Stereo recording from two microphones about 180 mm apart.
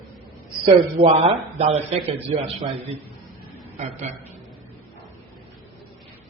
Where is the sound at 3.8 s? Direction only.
40° right (ahead or behind).